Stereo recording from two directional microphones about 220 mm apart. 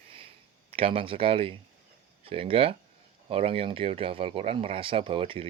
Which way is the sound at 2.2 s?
25° right (ahead or behind).